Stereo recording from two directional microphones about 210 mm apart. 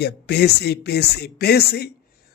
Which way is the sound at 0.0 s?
50° left (ahead or behind).